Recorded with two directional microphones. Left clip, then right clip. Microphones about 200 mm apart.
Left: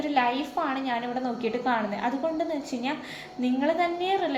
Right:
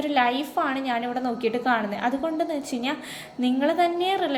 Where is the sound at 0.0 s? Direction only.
40° right (ahead or behind).